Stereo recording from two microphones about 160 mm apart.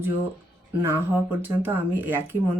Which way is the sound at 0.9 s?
15° right (ahead or behind).